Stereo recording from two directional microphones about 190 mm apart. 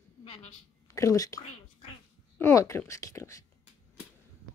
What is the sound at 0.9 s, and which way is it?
A woman's voice, 15° left (ahead or behind).